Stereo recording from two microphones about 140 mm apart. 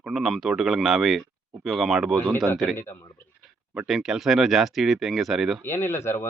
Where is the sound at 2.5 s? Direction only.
Centre (ahead or behind).